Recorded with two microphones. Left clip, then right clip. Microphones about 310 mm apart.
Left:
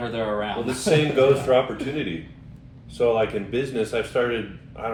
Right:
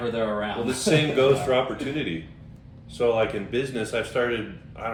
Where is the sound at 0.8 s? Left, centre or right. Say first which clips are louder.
Left 2 dB; centre.